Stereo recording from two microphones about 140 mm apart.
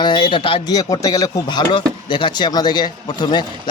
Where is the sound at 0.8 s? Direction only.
25° left (ahead or behind).